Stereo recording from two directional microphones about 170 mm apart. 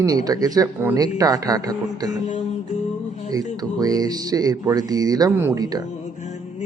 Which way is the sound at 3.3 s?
20° right (ahead or behind).